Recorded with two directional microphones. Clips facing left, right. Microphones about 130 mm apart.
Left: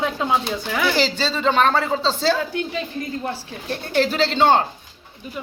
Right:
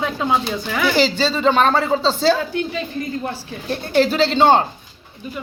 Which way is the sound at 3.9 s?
15° right (ahead or behind).